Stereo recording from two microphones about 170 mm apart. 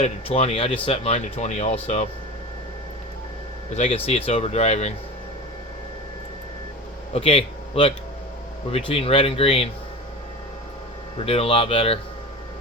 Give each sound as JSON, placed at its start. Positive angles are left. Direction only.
{"t": 0.0, "sound": "speech", "side_deg": 35}
{"t": 3.8, "sound": "speech", "side_deg": 35}
{"t": 7.1, "sound": "a man's voice", "side_deg": 35}
{"t": 11.3, "sound": "speech", "side_deg": 35}